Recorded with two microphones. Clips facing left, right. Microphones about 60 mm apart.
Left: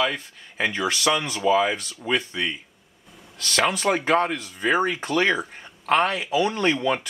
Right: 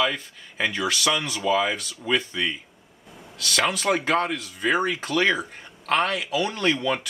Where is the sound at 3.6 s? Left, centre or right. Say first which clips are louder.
Left 1 dB; centre.